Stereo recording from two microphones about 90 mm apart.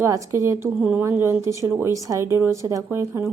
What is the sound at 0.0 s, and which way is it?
Speech, 35° right (ahead or behind).